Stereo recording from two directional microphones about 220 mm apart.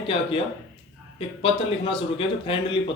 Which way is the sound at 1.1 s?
25° left (ahead or behind).